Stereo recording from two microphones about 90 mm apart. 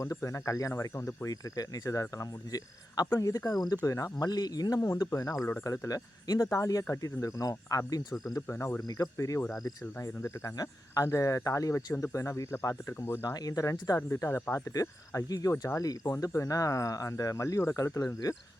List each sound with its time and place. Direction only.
0.0 s speech: 35° left (ahead or behind)
8.4 s speech: 30° left (ahead or behind)
8.9 s speech: 40° left (ahead or behind)
13.2 s speech: 45° left (ahead or behind); by 14.5 s 25° left (ahead or behind)
14.5 s speech: 40° left (ahead or behind)